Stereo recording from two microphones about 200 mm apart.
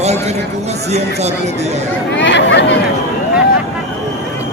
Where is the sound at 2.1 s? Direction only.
60° left (ahead or behind).